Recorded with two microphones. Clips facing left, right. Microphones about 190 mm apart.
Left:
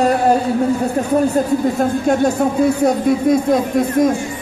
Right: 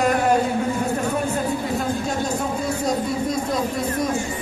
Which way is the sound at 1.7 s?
60° left (ahead or behind).